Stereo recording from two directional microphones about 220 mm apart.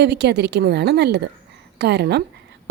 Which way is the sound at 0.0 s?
50° right (ahead or behind).